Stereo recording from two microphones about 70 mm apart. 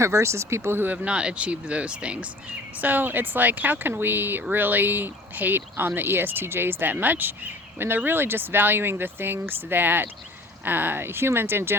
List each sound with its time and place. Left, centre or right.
0.0 s speech: right
0.9 s speech: centre; by 11.7 s right